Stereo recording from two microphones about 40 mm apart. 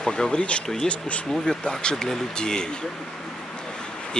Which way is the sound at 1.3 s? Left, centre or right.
Centre.